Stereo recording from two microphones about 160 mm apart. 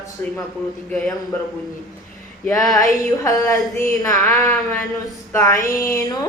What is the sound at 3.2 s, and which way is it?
Speech, 25° left (ahead or behind).